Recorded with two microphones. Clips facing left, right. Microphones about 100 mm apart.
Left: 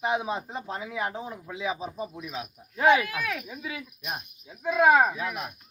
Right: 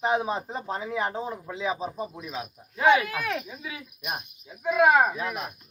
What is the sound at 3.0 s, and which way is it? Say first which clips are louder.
Speech: right 2 dB; 30° right (ahead or behind).